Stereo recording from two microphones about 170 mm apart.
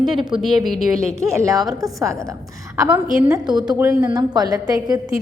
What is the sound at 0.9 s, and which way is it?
A woman's voice, 20° right (ahead or behind).